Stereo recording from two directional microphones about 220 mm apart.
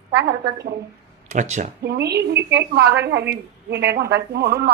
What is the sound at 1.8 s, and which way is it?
A woman's voice, 45° right (ahead or behind).